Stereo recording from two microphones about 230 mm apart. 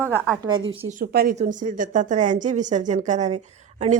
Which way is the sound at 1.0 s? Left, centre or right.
Right.